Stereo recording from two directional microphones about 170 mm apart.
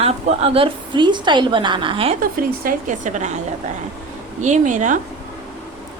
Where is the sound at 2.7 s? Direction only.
50° right (ahead or behind).